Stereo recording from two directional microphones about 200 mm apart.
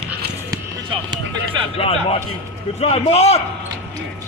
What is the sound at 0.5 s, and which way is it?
Speech, 20° right (ahead or behind).